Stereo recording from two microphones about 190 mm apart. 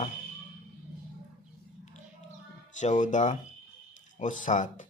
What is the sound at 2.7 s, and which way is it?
Speech, 40° left (ahead or behind).